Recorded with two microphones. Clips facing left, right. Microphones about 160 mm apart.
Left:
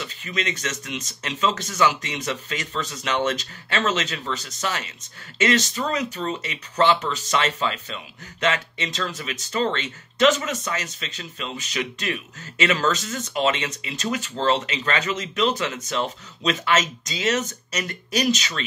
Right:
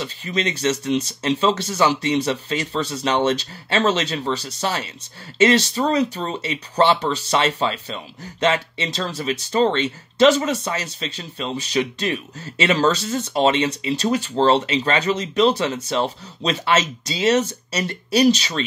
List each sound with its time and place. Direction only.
0.0 s speech: 30° right (ahead or behind)